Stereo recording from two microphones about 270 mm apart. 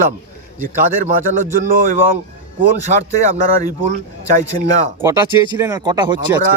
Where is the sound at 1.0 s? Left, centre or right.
Right.